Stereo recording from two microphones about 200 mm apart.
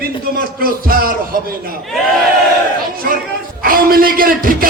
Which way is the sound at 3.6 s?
45° right (ahead or behind).